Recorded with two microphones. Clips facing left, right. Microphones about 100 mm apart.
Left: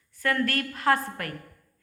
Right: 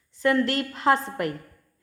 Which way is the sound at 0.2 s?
20° right (ahead or behind).